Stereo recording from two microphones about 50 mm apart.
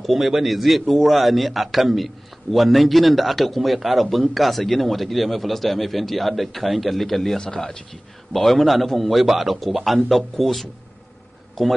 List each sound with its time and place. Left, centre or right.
0.0 s speech: centre